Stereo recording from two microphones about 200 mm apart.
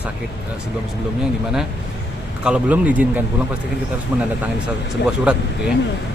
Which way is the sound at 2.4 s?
5° right (ahead or behind).